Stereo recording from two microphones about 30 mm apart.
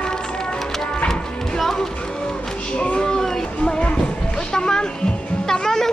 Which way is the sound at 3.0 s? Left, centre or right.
Centre.